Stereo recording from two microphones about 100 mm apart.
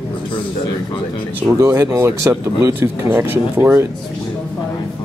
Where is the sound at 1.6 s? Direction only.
25° right (ahead or behind).